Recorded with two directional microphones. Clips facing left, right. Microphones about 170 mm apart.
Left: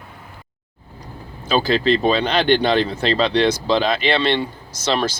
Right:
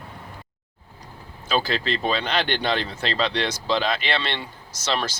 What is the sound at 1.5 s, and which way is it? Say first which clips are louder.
Speech: left 7 dB; 30° left (ahead or behind).